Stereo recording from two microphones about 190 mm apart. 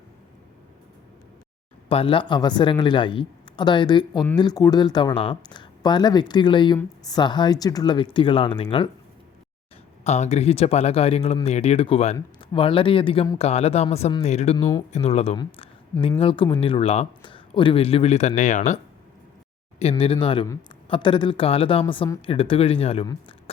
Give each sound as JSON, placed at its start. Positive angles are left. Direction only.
{"t": 1.9, "sound": "a man's voice", "side_deg": 30}
{"t": 10.0, "sound": "a man's voice", "side_deg": 35}
{"t": 13.4, "sound": "speech", "side_deg": 35}
{"t": 19.8, "sound": "a man's voice", "side_deg": 30}